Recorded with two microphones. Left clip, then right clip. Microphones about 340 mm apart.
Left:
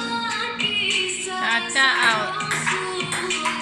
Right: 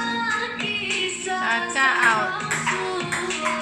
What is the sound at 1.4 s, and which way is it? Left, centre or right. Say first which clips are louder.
Music: left 2 dB; centre.